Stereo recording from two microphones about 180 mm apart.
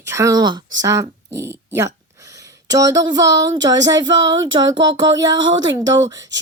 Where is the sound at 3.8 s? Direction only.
20° right (ahead or behind).